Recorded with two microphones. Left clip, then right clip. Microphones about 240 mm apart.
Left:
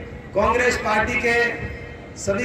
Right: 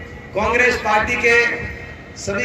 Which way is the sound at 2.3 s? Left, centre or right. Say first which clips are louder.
Right 1 dB; left.